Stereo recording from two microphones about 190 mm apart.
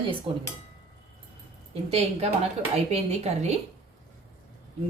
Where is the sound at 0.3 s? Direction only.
30° right (ahead or behind).